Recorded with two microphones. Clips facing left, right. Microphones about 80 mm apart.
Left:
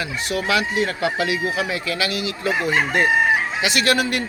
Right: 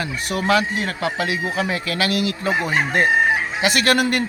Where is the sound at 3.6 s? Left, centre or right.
Right.